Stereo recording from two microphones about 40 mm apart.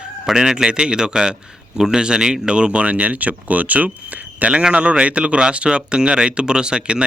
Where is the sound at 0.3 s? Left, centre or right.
Centre.